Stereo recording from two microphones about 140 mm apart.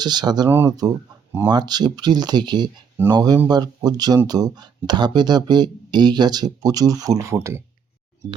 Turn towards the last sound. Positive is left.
turn(degrees=-20)  # may be behind; listen again after turning